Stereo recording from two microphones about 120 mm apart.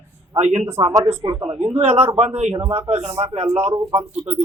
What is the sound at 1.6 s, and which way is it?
Speech, 55° right (ahead or behind).